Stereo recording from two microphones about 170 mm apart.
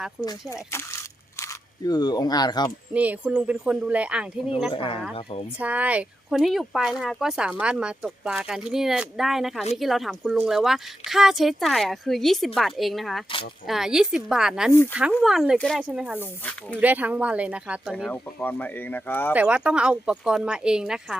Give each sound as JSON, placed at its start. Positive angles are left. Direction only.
{"t": 0.2, "sound": "speech", "side_deg": 0}
{"t": 0.5, "sound": "speech", "side_deg": 15}
{"t": 2.9, "sound": "speech", "side_deg": -10}
{"t": 4.7, "sound": "speech", "side_deg": 30}
{"t": 5.5, "sound": "speech", "side_deg": -10}
{"t": 14.7, "sound": "speech", "side_deg": 15}
{"t": 15.2, "sound": "speech", "side_deg": 0}
{"t": 16.4, "sound": "speech", "side_deg": 10}
{"t": 16.7, "sound": "speech", "side_deg": -10}
{"t": 17.9, "sound": "speech", "side_deg": 5}
{"t": 19.3, "sound": "speech", "side_deg": -5}